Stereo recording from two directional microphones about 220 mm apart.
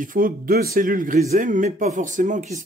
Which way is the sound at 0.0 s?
40° right (ahead or behind).